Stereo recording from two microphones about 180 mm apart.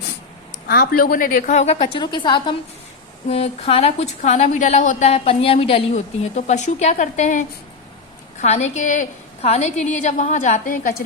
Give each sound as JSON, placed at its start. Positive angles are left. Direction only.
{"t": 0.7, "sound": "a woman's voice", "side_deg": 55}